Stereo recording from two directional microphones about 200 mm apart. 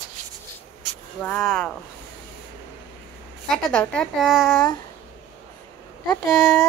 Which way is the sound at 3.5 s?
5° left (ahead or behind).